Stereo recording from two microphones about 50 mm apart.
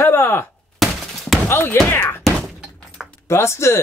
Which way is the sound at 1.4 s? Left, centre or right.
Left.